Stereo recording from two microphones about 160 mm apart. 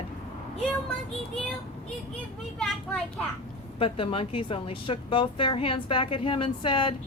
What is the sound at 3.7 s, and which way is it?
Speech, 35° left (ahead or behind).